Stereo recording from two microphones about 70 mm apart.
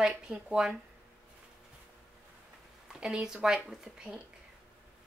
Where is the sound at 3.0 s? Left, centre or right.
Centre.